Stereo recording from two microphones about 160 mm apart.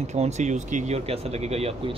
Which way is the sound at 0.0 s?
45° right (ahead or behind).